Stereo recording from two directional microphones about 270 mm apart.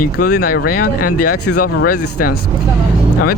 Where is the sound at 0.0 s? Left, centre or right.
Left.